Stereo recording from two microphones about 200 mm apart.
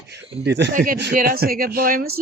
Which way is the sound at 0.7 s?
45° right (ahead or behind).